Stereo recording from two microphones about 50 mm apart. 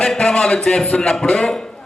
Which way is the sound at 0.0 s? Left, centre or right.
Centre.